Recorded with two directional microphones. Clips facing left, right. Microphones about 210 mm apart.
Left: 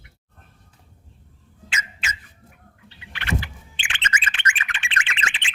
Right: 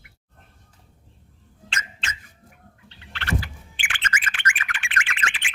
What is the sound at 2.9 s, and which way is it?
Bird, 10° left (ahead or behind).